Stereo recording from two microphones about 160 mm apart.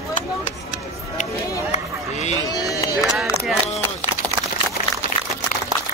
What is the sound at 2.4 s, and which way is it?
Run, 20° left (ahead or behind).